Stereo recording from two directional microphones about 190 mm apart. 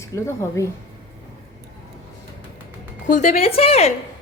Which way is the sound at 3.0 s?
40° left (ahead or behind).